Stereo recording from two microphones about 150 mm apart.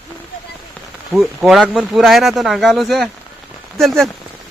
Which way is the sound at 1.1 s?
Centre (ahead or behind).